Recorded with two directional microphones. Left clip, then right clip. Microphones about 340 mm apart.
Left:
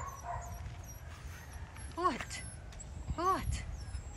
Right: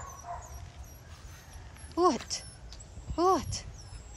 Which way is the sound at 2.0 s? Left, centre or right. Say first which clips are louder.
Right 7 dB; centre.